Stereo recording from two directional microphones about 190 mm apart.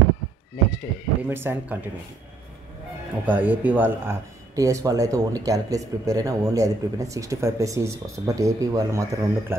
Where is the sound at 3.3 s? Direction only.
10° right (ahead or behind).